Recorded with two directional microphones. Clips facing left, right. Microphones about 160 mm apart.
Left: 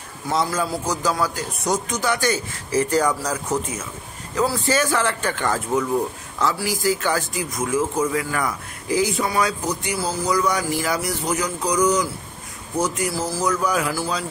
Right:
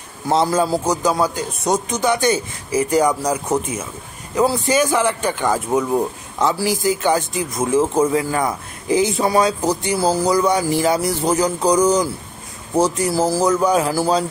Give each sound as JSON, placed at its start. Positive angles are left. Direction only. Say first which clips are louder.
{"t": 0.3, "sound": "speech", "louder": "right 6 dB", "side_deg": -25}
{"t": 13.9, "sound": "speech", "louder": "right 8 dB", "side_deg": -40}